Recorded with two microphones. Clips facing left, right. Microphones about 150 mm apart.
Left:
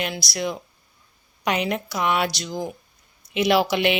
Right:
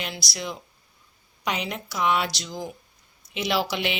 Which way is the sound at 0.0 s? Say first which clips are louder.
Left 6 dB; 55° left (ahead or behind).